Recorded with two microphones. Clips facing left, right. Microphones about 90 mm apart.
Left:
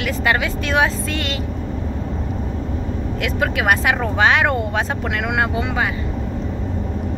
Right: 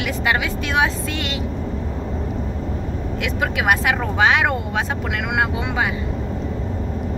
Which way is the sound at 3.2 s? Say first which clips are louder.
Left 1 dB; 10° right (ahead or behind).